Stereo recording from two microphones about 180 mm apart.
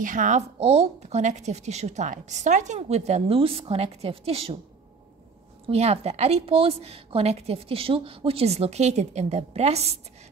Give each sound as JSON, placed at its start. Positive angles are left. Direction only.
{"t": 0.0, "sound": "speech", "side_deg": -45}
{"t": 5.7, "sound": "speech", "side_deg": -35}